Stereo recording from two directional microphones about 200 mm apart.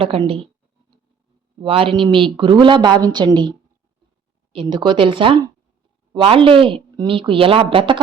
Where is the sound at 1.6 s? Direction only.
25° right (ahead or behind).